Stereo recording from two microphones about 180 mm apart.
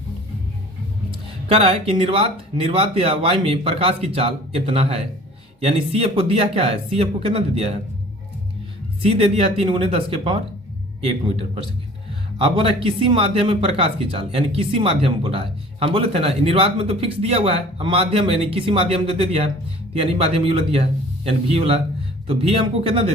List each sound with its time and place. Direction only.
1.5 s a man's voice: 35° right (ahead or behind)
9.0 s a man's voice: 35° right (ahead or behind)